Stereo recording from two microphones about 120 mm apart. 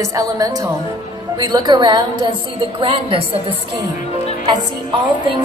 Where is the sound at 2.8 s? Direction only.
50° right (ahead or behind).